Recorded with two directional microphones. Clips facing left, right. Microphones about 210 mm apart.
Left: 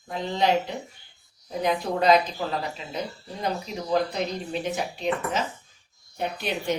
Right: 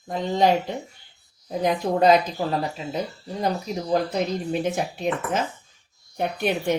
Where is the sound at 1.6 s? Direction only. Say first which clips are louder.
Right 3 dB; 40° right (ahead or behind).